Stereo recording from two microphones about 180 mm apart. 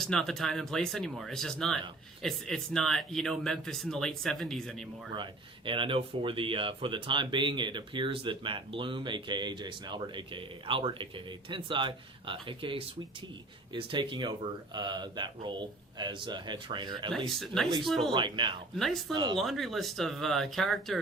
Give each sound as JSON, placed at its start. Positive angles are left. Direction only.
{"t": 0.0, "sound": "speech", "side_deg": 0}
{"t": 5.1, "sound": "speech", "side_deg": -25}
{"t": 17.2, "sound": "speech", "side_deg": 0}
{"t": 18.1, "sound": "speech", "side_deg": -25}
{"t": 18.8, "sound": "speech", "side_deg": 0}
{"t": 19.1, "sound": "speech", "side_deg": -25}
{"t": 19.4, "sound": "speech", "side_deg": 0}